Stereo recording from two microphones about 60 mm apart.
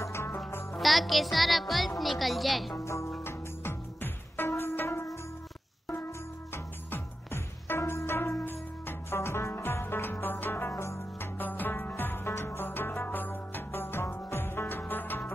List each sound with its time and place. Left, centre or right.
0.0 s music: left
0.7 s speech: centre
2.8 s music: left
3.3 s music: left
6.5 s music: left
10.7 s music: left
11.3 s music: left